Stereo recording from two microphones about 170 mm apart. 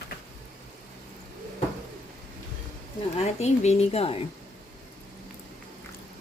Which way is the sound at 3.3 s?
40° left (ahead or behind).